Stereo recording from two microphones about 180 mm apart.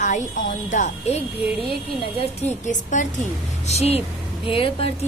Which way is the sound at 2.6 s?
45° left (ahead or behind).